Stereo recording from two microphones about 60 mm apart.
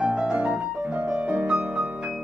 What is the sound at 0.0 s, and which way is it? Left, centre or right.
Piano, centre.